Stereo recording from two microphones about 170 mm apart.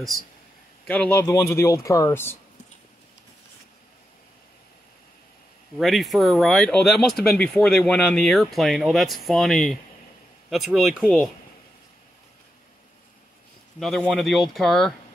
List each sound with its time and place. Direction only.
0.8 s speech: 10° left (ahead or behind)
5.8 s speech: centre (ahead or behind)
13.7 s speech: centre (ahead or behind)